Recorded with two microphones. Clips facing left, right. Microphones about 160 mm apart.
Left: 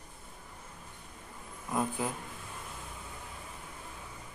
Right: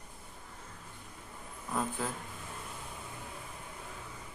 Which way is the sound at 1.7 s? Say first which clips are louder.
Left 2 dB; 15° left (ahead or behind).